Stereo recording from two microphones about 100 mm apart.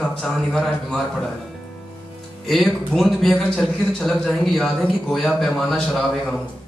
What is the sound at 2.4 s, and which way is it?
Speech, 5° left (ahead or behind).